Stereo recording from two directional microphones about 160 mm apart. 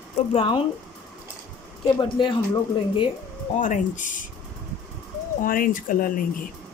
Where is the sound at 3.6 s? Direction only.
50° left (ahead or behind).